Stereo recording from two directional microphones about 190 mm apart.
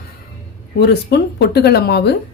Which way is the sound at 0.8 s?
60° left (ahead or behind).